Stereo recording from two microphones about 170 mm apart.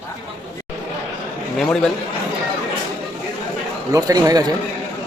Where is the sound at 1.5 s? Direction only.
5° left (ahead or behind).